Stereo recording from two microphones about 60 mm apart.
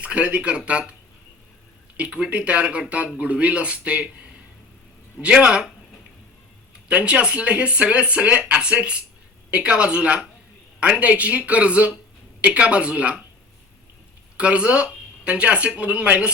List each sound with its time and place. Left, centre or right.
0.0 s speech: right
2.0 s speech: centre
5.2 s speech: centre
6.8 s speech: centre
14.3 s speech: centre